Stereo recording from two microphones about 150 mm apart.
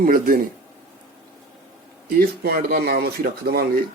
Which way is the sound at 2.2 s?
80° right.